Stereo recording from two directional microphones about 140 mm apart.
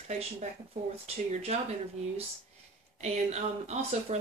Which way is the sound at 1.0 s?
45° right (ahead or behind).